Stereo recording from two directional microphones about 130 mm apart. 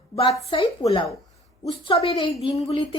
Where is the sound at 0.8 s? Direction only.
40° left (ahead or behind).